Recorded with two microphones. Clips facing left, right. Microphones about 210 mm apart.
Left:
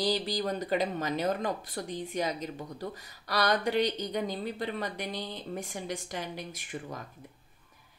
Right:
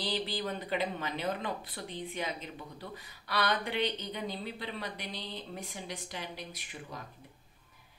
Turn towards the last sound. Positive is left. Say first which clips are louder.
# left 6 dB
turn(degrees=50)  # may be behind; listen again after turning